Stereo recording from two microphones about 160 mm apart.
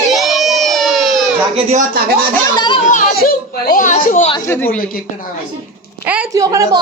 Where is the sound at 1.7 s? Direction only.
65° right (ahead or behind).